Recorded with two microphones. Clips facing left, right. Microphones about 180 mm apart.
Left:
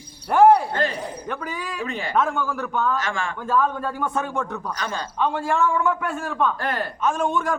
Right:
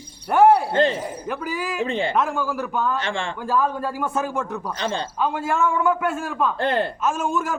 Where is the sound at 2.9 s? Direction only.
30° right (ahead or behind).